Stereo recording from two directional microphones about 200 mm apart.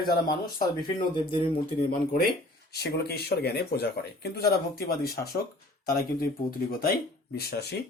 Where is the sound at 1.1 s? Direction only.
25° left (ahead or behind).